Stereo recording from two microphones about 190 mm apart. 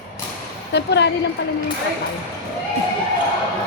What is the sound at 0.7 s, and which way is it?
Speech, 65° left (ahead or behind).